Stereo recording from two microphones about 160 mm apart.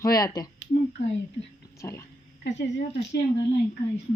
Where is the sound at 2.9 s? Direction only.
90° left.